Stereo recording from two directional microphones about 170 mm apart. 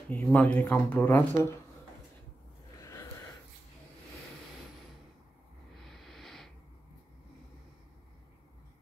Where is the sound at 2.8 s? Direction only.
20° left (ahead or behind).